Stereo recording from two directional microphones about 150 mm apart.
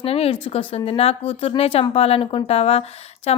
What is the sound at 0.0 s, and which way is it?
A woman's voice, 40° left (ahead or behind).